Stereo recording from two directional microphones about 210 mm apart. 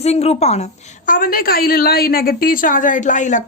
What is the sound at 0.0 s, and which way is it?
A woman's voice, 30° left (ahead or behind).